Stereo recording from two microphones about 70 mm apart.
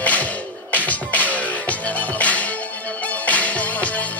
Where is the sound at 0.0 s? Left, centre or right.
Left.